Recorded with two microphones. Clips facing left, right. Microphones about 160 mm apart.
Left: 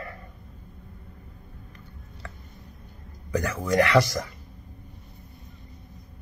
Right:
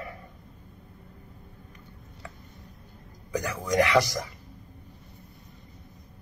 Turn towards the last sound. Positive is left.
turn(degrees=-15)  # may be behind; listen again after turning